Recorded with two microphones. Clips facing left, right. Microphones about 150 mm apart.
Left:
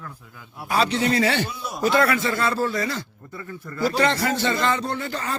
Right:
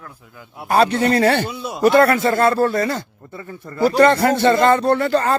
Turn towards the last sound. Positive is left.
turn(degrees=-60)  # may be behind; listen again after turning